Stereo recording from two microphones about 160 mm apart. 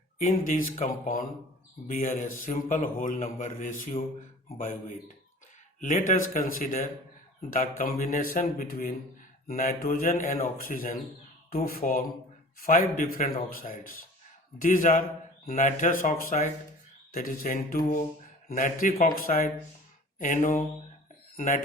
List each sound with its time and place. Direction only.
0.3 s a man's voice: 55° left (ahead or behind)